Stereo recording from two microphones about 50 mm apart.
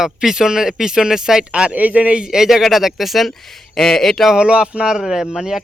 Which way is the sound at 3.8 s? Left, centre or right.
Centre.